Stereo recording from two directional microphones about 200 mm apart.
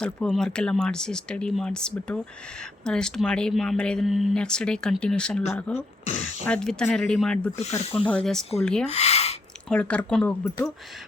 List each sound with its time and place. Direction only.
0.0 s speech: 5° left (ahead or behind)
7.8 s speech: 30° left (ahead or behind)
8.0 s speech: 5° left (ahead or behind)
8.9 s speech: 30° left (ahead or behind)
9.6 s speech: 5° left (ahead or behind)